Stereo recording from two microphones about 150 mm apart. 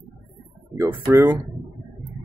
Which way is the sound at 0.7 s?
15° right (ahead or behind).